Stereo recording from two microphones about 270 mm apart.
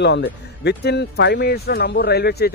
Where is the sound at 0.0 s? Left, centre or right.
Left.